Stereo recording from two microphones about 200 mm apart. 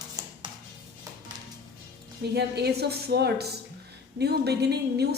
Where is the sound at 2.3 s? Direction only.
55° right (ahead or behind).